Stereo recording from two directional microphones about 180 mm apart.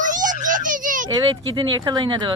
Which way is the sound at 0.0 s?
45° right (ahead or behind).